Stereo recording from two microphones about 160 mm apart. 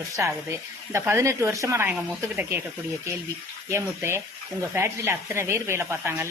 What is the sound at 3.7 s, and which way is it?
Speech, 15° right (ahead or behind).